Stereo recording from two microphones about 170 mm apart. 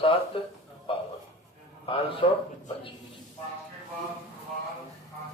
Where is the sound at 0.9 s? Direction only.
30° left (ahead or behind).